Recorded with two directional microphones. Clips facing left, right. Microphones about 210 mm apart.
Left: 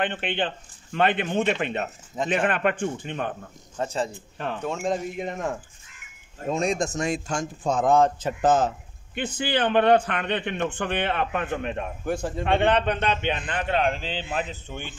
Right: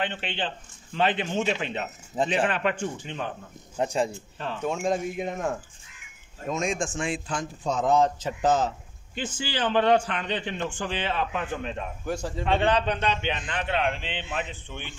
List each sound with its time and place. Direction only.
0.0 s a man's voice: 55° left (ahead or behind)
3.7 s speech: 15° right (ahead or behind)
4.1 s a man's voice: 55° left (ahead or behind)
4.6 s speech: centre (ahead or behind)
6.4 s a man's voice: 35° left (ahead or behind)